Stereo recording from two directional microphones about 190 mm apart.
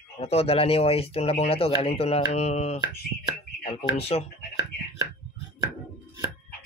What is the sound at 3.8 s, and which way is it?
Speech, 30° left (ahead or behind).